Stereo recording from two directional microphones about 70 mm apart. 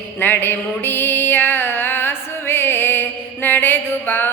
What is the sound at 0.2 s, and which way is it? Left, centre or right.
Music, left.